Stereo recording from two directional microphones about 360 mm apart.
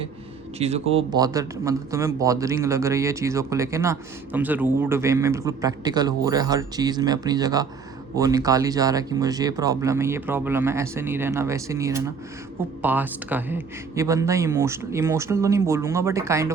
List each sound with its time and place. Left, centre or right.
0.6 s speech: centre